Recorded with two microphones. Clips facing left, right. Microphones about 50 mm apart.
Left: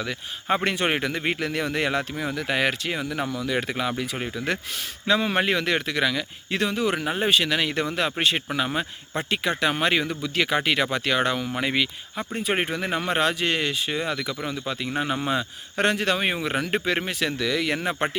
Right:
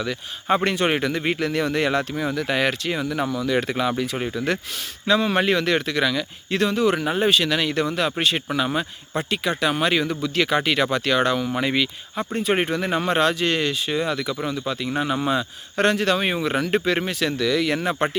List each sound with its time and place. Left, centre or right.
0.4 s a man's voice: centre
7.3 s speech: centre
9.3 s speech: left
10.1 s a man's voice: centre